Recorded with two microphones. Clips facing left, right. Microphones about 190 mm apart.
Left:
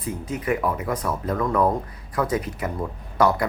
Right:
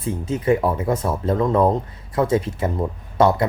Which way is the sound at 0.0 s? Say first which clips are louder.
Right 5 dB; 25° right (ahead or behind).